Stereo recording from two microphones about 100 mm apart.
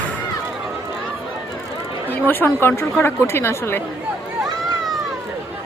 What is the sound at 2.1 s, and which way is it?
A woman's voice, 20° left (ahead or behind).